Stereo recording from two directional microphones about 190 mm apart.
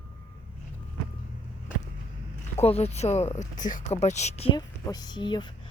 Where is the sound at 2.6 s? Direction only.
35° left (ahead or behind).